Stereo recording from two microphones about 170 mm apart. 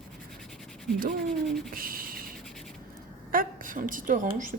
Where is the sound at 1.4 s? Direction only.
Centre (ahead or behind).